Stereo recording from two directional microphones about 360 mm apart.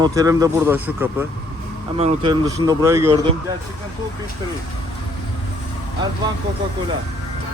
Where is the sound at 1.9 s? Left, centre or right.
Centre.